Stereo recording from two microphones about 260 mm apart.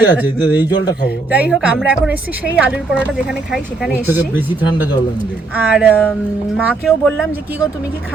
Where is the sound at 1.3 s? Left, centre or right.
Centre.